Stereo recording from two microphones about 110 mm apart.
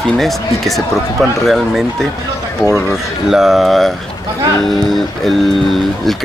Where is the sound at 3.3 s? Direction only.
5° right (ahead or behind).